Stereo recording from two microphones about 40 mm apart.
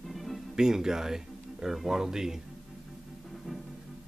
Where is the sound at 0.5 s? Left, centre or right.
Centre.